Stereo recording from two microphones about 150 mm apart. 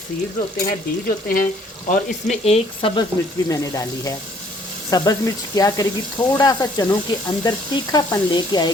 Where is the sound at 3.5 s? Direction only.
20° left (ahead or behind).